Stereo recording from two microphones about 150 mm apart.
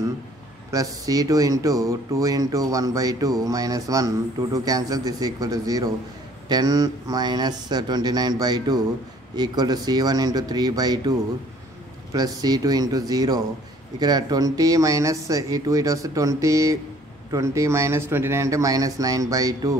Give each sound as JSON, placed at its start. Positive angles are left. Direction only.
{"t": 0.7, "sound": "speech", "side_deg": -25}